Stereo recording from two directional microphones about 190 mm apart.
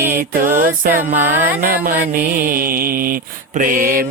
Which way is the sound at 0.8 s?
45° right (ahead or behind).